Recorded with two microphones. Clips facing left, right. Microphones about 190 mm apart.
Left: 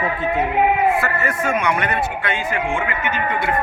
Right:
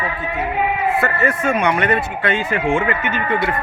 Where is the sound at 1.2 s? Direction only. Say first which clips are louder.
Right 3 dB; 35° right (ahead or behind).